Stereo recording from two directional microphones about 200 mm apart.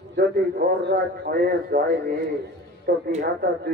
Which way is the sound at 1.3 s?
45° right (ahead or behind).